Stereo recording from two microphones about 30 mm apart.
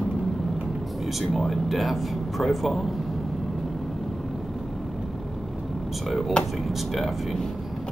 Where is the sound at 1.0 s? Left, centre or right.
Centre.